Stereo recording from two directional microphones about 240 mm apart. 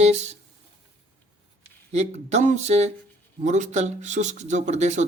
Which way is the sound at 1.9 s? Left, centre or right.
Right.